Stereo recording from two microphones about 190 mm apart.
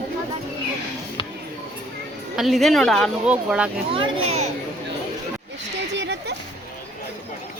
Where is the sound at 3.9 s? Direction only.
30° right (ahead or behind).